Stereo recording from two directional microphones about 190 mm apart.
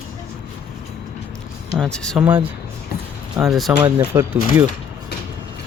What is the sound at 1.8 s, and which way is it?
Speech, 5° left (ahead or behind).